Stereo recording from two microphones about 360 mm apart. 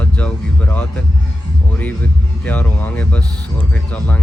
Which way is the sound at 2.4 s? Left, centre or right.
Centre.